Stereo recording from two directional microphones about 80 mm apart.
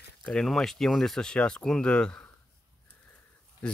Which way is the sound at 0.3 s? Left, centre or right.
Centre.